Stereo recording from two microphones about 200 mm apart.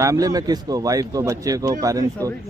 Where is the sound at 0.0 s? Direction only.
15° right (ahead or behind).